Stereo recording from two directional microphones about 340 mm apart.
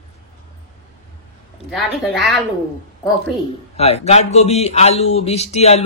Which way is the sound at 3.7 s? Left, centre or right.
Centre.